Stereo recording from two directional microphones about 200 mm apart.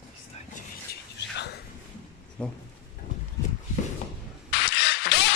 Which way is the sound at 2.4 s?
5° left (ahead or behind).